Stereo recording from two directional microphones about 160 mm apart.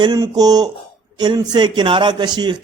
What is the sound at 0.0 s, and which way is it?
A man's voice, 25° right (ahead or behind).